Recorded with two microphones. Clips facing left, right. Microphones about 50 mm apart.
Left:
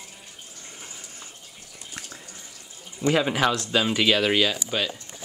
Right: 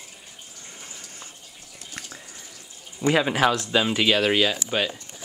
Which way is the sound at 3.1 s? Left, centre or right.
Centre.